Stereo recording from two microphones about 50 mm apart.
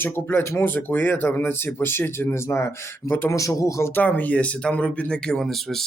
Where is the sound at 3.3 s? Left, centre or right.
Left.